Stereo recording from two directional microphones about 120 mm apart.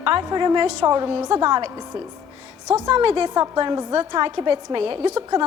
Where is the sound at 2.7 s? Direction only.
35° right (ahead or behind).